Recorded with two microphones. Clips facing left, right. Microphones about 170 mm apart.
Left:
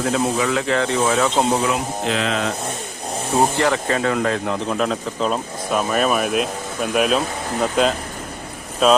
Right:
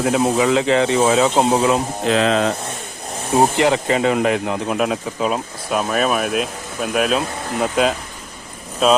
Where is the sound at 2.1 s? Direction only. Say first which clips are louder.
Right 6 dB; 35° right (ahead or behind).